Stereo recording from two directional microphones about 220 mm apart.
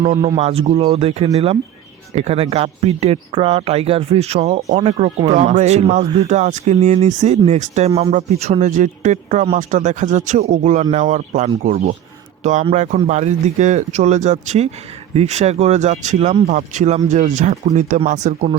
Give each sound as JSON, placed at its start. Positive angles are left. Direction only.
{"t": 0.0, "sound": "speech", "side_deg": -20}